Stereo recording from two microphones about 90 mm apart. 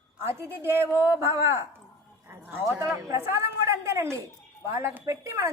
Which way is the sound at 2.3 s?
25° right (ahead or behind).